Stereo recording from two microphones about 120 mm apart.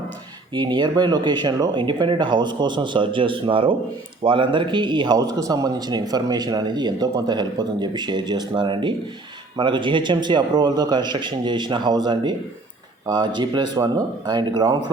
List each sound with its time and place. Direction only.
0.5 s speech: 40° right (ahead or behind)